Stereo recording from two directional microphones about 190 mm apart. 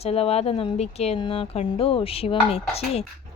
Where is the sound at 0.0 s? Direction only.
30° left (ahead or behind).